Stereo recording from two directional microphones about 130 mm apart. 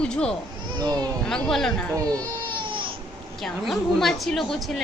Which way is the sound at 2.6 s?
40° right (ahead or behind).